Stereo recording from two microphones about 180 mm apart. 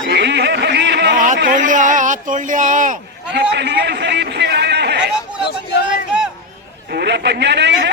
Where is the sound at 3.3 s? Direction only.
70° right (ahead or behind).